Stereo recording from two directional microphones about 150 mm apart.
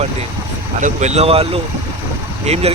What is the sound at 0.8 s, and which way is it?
Speech, 55° right (ahead or behind).